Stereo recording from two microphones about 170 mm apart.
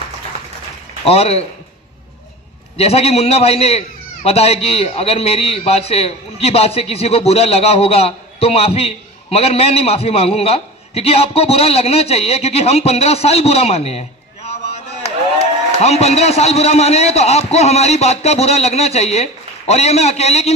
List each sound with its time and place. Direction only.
1.0 s a man's voice: 35° left (ahead or behind)
2.7 s a man's voice: 35° left (ahead or behind)
14.4 s a sound: 40° left (ahead or behind)
15.8 s a man's voice: 40° left (ahead or behind)